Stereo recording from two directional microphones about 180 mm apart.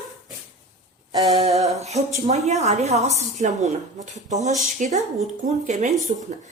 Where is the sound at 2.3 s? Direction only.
35° right (ahead or behind).